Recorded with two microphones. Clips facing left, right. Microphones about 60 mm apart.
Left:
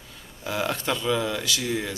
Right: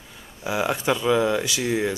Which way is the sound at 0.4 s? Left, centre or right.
Centre.